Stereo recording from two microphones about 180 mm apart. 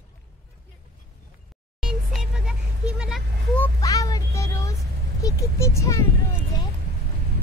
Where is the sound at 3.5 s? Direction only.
15° left (ahead or behind).